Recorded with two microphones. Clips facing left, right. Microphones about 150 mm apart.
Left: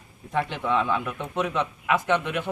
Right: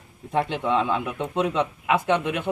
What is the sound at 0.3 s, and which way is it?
Speech, 15° right (ahead or behind).